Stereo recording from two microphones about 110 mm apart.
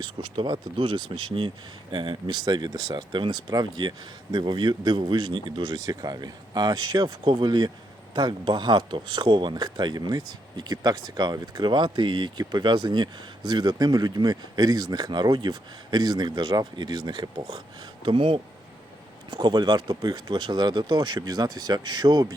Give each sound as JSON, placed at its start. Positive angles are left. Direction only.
{"t": 0.0, "sound": "speech", "side_deg": -45}
{"t": 19.3, "sound": "speech", "side_deg": -40}